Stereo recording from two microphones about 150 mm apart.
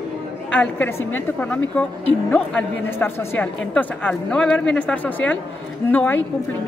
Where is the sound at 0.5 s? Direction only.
10° left (ahead or behind).